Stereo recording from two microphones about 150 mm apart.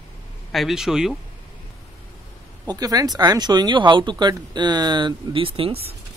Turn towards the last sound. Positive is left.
turn(degrees=-40)  # may be behind; listen again after turning